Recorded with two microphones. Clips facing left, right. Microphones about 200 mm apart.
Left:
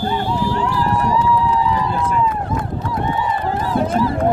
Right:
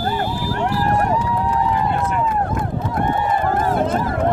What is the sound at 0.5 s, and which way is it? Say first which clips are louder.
Run: even; 55° right (ahead or behind).